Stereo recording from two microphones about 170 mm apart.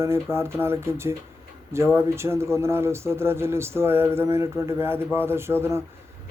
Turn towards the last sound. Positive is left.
turn(degrees=-15)  # may be behind; listen again after turning